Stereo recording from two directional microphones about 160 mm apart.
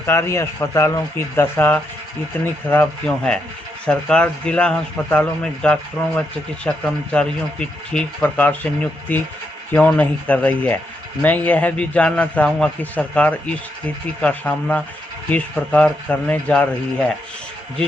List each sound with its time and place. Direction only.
0.0 s speech: 15° left (ahead or behind)
3.8 s speech: 5° left (ahead or behind)